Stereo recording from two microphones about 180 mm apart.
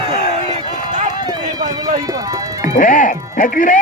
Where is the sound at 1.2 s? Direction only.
20° right (ahead or behind).